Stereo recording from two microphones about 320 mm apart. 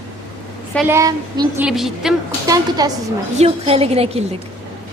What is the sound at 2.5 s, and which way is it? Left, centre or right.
A woman's voice, centre.